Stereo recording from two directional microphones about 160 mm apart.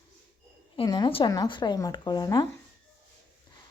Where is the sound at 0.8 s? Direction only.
25° left (ahead or behind).